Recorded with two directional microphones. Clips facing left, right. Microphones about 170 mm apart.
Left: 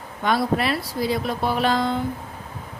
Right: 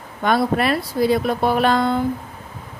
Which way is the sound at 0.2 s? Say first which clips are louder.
Right 3 dB; 55° right (ahead or behind).